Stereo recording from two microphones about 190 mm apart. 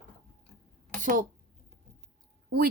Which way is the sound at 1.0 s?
45° right (ahead or behind).